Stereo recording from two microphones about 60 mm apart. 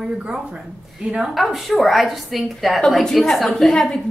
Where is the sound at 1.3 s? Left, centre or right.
Centre.